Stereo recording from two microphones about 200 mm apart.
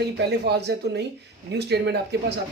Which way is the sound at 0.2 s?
55° right (ahead or behind).